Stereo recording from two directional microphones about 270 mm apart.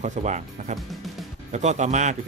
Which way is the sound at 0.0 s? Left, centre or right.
Right.